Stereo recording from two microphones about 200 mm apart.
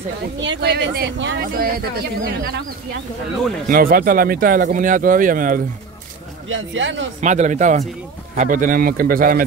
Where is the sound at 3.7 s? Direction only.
45° right (ahead or behind).